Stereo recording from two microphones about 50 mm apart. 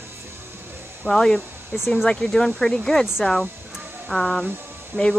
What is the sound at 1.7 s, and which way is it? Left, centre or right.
Speech, left.